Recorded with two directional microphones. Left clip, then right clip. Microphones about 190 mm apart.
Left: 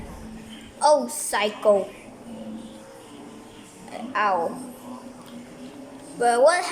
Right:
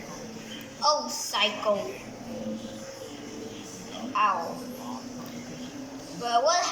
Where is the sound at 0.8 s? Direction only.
35° left (ahead or behind).